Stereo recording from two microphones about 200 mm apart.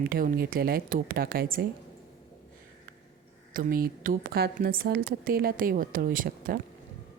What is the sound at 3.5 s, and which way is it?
Speech, 45° right (ahead or behind).